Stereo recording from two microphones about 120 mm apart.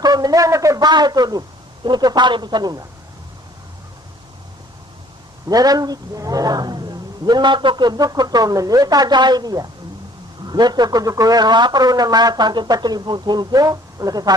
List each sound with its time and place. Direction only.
0.0 s a man's voice: 35° right (ahead or behind)
5.5 s a man's voice: 30° right (ahead or behind)